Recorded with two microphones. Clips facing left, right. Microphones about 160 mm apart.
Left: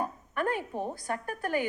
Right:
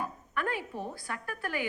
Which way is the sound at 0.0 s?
45° left (ahead or behind).